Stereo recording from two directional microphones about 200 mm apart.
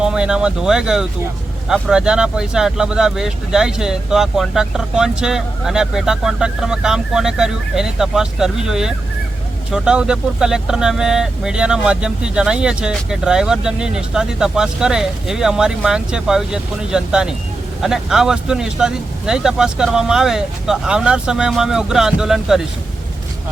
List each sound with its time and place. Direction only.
0.0 s speech: 5° right (ahead or behind)